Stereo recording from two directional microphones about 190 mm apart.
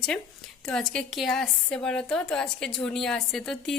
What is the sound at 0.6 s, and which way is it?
A woman's voice, 5° left (ahead or behind).